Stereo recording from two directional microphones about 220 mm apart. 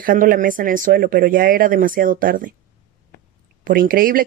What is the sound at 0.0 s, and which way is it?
Speech, 40° right (ahead or behind).